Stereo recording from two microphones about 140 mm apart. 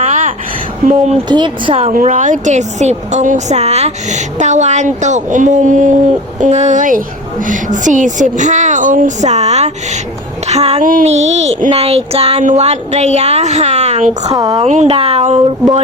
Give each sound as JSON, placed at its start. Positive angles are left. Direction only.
{"t": 0.0, "sound": "a sound", "side_deg": -55}
{"t": 0.9, "sound": "a woman's voice", "side_deg": -55}
{"t": 1.3, "sound": "speech", "side_deg": -35}
{"t": 1.9, "sound": "a woman's voice", "side_deg": -70}
{"t": 10.4, "sound": "a sound", "side_deg": -50}
{"t": 11.0, "sound": "a woman's voice", "side_deg": -50}
{"t": 14.3, "sound": "a woman's voice", "side_deg": -30}
{"t": 14.6, "sound": "a woman's voice", "side_deg": -50}